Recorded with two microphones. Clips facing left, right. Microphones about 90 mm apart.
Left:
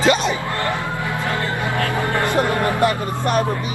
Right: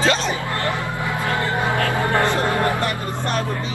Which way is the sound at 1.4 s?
20° right (ahead or behind).